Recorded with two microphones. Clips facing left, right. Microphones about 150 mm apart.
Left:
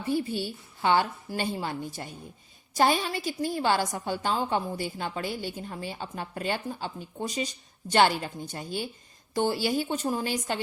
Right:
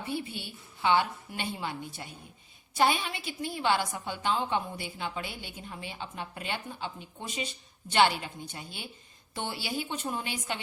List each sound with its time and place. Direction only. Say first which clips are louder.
0.0 s a woman's voice: left 7 dB; 40° left (ahead or behind)